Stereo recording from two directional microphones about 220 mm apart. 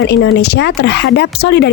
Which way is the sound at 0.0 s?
50° left (ahead or behind).